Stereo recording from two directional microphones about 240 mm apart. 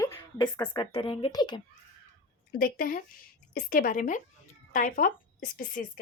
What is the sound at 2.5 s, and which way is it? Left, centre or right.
A woman's voice, left.